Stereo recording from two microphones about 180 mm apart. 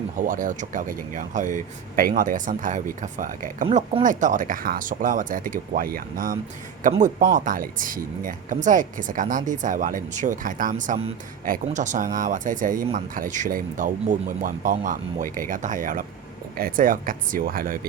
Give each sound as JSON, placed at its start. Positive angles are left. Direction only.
{"t": 0.2, "sound": "speech", "side_deg": -50}
{"t": 3.7, "sound": "speech", "side_deg": -30}
{"t": 4.0, "sound": "speech", "side_deg": -45}